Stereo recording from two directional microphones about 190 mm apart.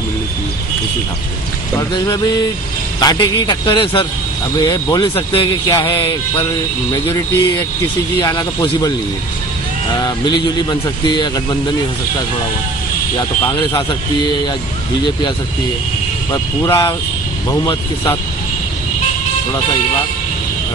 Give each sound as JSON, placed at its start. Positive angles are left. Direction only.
{"t": 1.8, "sound": "speech", "side_deg": 20}
{"t": 8.2, "sound": "speech", "side_deg": 20}
{"t": 10.3, "sound": "speech", "side_deg": 25}
{"t": 13.5, "sound": "speech", "side_deg": 20}
{"t": 16.3, "sound": "speech", "side_deg": 20}